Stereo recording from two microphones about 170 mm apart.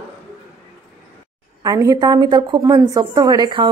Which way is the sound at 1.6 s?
20° right (ahead or behind).